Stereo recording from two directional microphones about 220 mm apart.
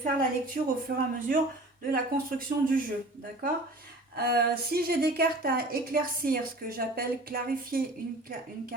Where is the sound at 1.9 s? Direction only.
40° right (ahead or behind).